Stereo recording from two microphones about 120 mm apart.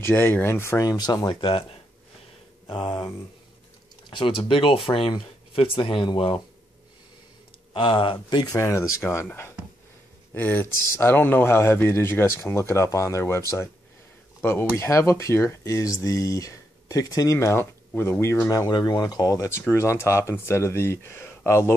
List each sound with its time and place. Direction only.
0.0 s speech: 15° left (ahead or behind); by 1.3 s 35° left (ahead or behind)
1.4 s speech: 50° left (ahead or behind)
2.7 s speech: 45° left (ahead or behind)
4.1 s speech: 50° left (ahead or behind)
7.7 s speech: 45° left (ahead or behind)
8.5 s speech: 25° left (ahead or behind)